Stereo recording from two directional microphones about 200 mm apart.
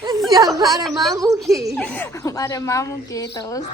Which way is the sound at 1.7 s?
5° left (ahead or behind).